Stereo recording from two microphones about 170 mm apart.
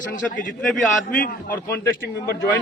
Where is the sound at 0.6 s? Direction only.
5° left (ahead or behind).